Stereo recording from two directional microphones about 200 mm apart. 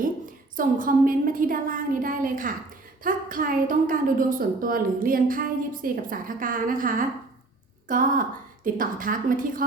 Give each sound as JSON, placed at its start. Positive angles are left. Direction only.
{"t": 0.5, "sound": "a woman's voice", "side_deg": -45}